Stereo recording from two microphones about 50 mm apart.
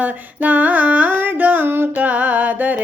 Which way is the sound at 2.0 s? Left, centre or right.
Right.